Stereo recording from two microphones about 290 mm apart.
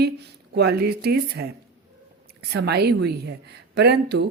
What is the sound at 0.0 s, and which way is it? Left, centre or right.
Speech, right.